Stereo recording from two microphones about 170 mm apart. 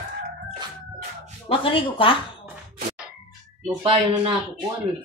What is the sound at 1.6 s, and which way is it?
Speech, 30° left (ahead or behind).